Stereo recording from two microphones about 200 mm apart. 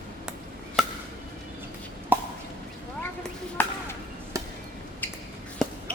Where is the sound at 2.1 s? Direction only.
10° right (ahead or behind).